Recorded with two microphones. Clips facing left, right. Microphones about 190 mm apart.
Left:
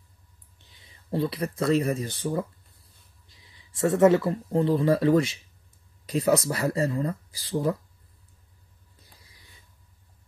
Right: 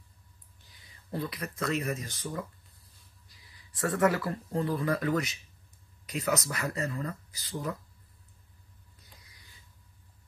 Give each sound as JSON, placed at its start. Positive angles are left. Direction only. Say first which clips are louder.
{"t": 0.7, "sound": "speech", "louder": "left 8 dB", "side_deg": 25}